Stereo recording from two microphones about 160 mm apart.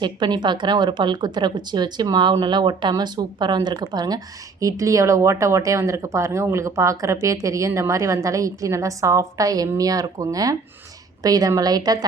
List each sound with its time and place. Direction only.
0.0 s speech: 25° right (ahead or behind)